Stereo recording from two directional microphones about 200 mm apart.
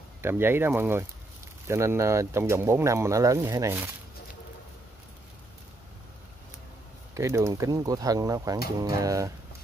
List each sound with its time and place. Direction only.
0.2 s speech: 10° right (ahead or behind)
7.2 s speech: 15° right (ahead or behind)